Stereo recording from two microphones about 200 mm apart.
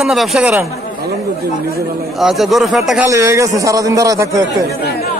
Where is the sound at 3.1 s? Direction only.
15° right (ahead or behind).